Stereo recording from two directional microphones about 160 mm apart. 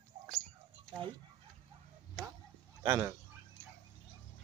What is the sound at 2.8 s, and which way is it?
Speech, 15° right (ahead or behind).